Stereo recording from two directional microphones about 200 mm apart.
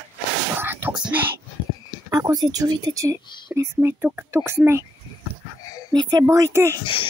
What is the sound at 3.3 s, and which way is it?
Whispering, 20° left (ahead or behind).